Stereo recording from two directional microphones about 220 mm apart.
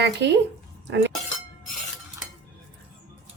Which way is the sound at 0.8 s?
50° right (ahead or behind).